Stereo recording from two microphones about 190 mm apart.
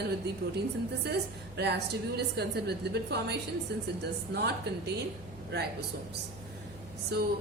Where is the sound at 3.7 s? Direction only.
60° right (ahead or behind).